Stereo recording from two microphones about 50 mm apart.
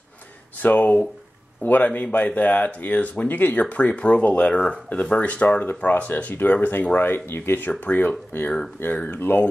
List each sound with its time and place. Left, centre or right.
0.6 s speech: left
7.8 s speech: left
8.8 s speech: left